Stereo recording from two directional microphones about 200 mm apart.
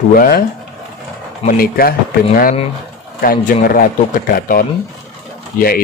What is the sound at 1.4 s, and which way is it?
A man's voice, 50° left (ahead or behind).